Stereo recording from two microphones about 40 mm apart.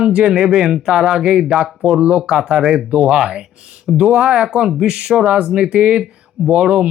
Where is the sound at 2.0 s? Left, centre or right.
Right.